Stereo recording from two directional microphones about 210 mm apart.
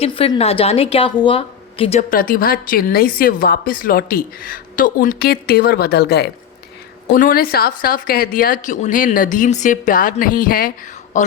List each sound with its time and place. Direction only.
0.0 s a woman's voice: 25° left (ahead or behind)